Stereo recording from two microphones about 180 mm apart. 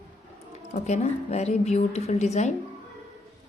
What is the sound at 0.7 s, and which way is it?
A woman's voice, 40° left (ahead or behind).